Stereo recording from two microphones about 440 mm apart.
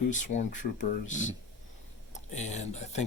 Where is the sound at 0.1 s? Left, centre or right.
Centre.